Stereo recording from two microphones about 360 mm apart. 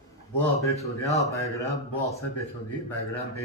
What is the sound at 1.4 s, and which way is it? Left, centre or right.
Speech, centre.